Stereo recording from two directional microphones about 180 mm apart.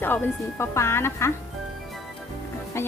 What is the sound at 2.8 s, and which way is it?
Music, 15° left (ahead or behind).